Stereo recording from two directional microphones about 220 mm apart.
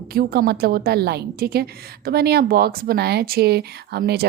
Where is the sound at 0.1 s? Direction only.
45° right (ahead or behind).